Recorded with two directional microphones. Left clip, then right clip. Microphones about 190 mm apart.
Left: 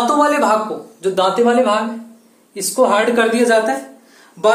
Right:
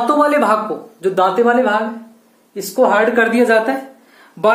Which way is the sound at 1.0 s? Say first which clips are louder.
Right 1 dB; 25° right (ahead or behind).